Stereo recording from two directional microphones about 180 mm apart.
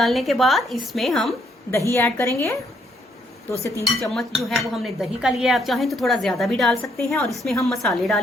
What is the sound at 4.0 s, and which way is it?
A woman's voice, centre (ahead or behind).